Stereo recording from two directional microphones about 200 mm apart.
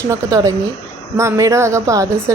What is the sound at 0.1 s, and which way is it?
A man's voice, 15° right (ahead or behind).